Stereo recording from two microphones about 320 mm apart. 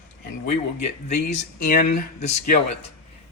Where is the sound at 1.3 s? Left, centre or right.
Left.